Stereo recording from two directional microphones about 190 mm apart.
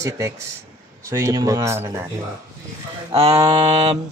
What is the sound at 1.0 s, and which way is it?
Speech, 15° right (ahead or behind).